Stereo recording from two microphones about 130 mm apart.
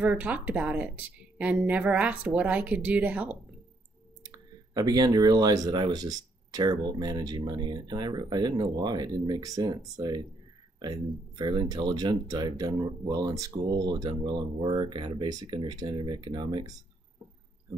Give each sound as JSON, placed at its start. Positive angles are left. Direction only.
{"t": 0.0, "sound": "speech", "side_deg": -10}
{"t": 4.2, "sound": "speech", "side_deg": -30}